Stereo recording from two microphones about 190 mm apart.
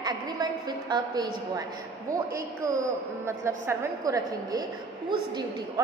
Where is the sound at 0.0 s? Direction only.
20° right (ahead or behind).